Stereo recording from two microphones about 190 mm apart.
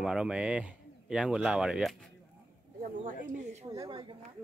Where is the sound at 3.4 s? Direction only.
35° right (ahead or behind).